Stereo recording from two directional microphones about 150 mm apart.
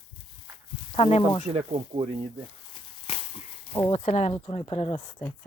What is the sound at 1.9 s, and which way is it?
Speech, 40° right (ahead or behind).